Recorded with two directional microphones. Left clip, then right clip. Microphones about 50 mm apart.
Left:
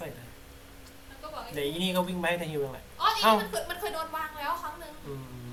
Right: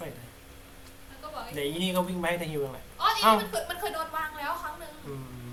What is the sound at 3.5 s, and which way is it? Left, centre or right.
Speech, left.